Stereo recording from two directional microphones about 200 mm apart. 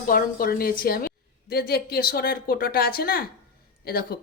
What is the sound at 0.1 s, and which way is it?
A woman's voice, 45° left (ahead or behind).